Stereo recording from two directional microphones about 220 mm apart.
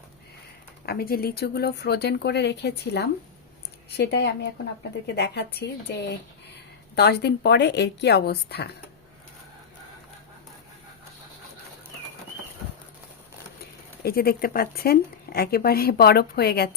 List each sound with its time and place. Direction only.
0.9 s a woman's voice: 45° left (ahead or behind)
14.0 s a woman's voice: 45° left (ahead or behind)